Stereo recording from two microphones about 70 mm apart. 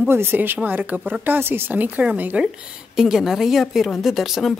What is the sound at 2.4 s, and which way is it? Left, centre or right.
A woman's voice, centre.